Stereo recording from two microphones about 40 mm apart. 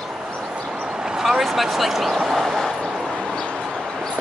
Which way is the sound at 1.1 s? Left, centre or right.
Centre.